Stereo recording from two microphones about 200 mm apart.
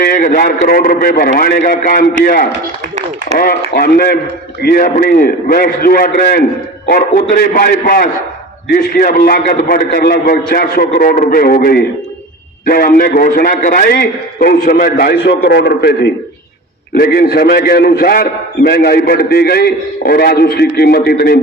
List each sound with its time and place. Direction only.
0.0 s a man's voice: 45° left (ahead or behind)